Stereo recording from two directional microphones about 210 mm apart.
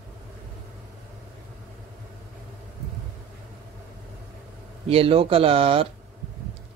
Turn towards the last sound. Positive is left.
turn(degrees=-25)  # may be behind; listen again after turning